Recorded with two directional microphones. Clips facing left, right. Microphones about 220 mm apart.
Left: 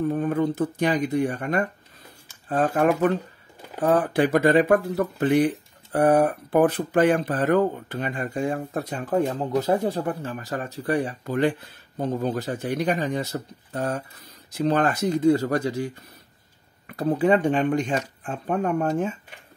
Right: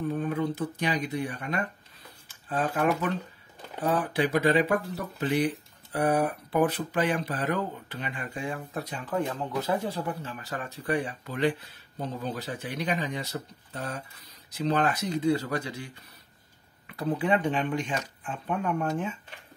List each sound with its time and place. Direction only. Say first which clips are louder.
0.1 s speech: left 5 dB; 45° left (ahead or behind)